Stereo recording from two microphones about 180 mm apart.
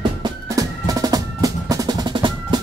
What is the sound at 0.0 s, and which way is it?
Music, 20° right (ahead or behind).